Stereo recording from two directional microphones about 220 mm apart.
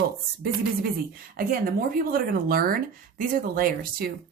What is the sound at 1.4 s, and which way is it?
Speech, 40° right (ahead or behind).